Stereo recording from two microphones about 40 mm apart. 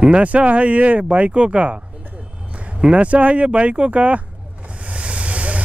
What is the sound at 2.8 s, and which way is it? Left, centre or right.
Speech, right.